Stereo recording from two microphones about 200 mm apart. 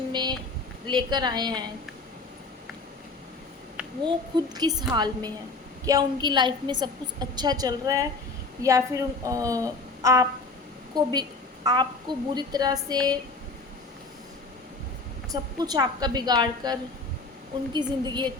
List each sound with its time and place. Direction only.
0.1 s a sound: 20° right (ahead or behind)
0.9 s a woman's voice: 20° right (ahead or behind)
4.0 s a woman's voice: 20° right (ahead or behind)
15.3 s a woman's voice: 20° right (ahead or behind)